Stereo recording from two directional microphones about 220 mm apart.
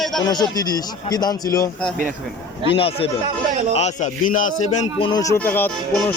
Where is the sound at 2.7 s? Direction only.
25° left (ahead or behind).